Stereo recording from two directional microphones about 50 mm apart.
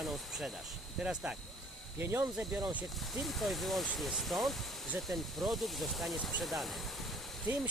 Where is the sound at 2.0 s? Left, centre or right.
Right.